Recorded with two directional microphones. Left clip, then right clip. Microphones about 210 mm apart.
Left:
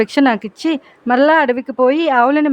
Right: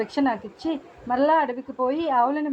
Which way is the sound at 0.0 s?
40° left (ahead or behind).